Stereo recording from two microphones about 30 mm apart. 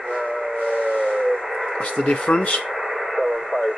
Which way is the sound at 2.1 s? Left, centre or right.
Left.